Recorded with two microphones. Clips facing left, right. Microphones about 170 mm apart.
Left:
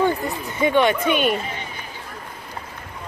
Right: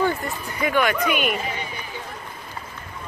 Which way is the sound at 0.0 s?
20° left (ahead or behind).